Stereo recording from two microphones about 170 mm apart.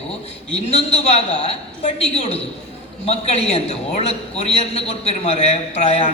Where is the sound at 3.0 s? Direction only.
35° left (ahead or behind).